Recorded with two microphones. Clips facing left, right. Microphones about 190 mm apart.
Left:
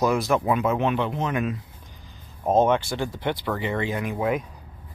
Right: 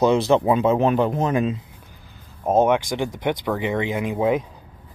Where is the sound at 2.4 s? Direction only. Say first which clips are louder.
Right 2 dB; 10° right (ahead or behind).